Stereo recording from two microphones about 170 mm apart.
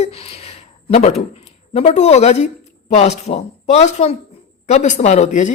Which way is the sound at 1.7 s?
40° left (ahead or behind).